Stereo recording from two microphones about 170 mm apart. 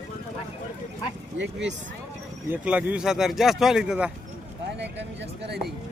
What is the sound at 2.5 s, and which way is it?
Speech, 10° right (ahead or behind).